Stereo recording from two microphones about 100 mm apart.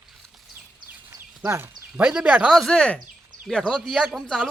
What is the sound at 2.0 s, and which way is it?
Speech, 10° right (ahead or behind).